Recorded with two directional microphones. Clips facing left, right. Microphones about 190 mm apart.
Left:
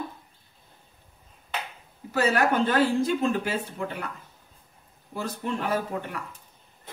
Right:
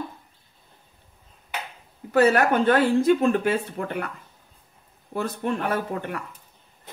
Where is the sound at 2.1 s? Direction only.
60° right (ahead or behind).